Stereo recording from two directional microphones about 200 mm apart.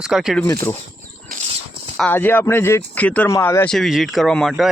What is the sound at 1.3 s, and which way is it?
Horse, 35° right (ahead or behind).